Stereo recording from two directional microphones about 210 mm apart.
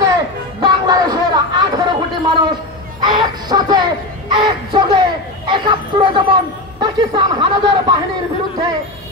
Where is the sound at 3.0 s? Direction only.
20° right (ahead or behind).